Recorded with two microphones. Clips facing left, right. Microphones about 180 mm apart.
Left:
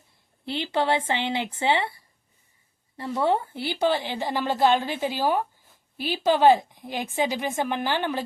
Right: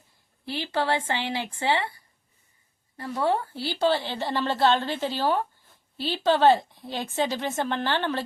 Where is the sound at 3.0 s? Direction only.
25° left (ahead or behind).